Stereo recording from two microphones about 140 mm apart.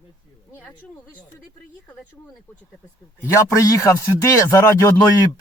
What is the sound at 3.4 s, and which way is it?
Speech, 25° left (ahead or behind).